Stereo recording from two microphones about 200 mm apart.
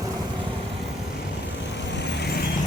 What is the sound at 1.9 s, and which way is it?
Vehicle, 60° left (ahead or behind).